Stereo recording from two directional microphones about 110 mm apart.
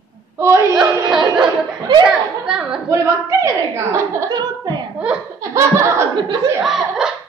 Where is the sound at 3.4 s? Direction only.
25° right (ahead or behind).